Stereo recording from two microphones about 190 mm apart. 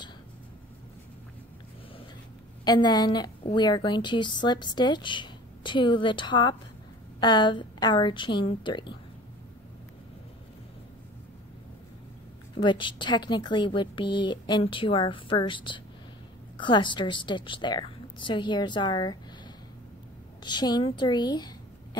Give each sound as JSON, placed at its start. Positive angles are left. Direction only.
{"t": 2.6, "sound": "a woman's voice", "side_deg": 20}
{"t": 12.5, "sound": "a woman's voice", "side_deg": 25}
{"t": 20.4, "sound": "a woman's voice", "side_deg": 20}